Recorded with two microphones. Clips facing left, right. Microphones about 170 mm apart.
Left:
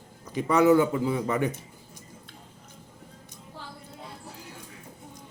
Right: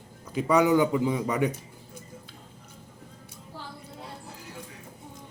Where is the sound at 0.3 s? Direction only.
10° right (ahead or behind).